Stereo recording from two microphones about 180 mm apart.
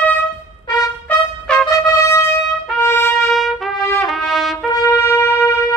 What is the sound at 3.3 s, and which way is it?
Trumpet, centre (ahead or behind).